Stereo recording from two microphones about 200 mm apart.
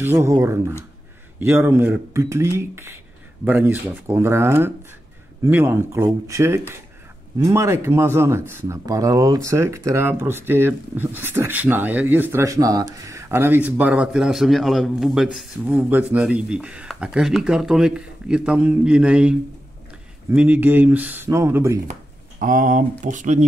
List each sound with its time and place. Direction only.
0.0 s speech: 10° right (ahead or behind)
22.4 s speech: 40° right (ahead or behind)